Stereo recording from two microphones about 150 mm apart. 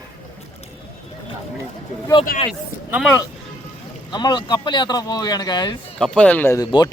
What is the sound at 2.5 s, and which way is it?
Speech, centre (ahead or behind).